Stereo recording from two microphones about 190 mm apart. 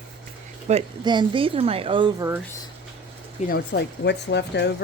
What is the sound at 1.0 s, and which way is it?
A woman's voice, 25° right (ahead or behind).